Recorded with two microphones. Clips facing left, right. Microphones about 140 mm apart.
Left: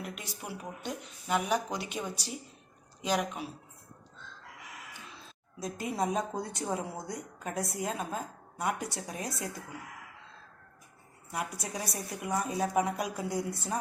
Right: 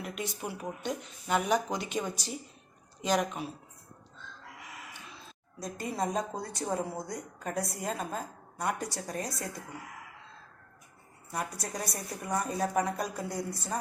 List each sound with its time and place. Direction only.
0.0 s a woman's voice: centre (ahead or behind)
5.5 s a woman's voice: centre (ahead or behind)
11.3 s a woman's voice: 5° left (ahead or behind)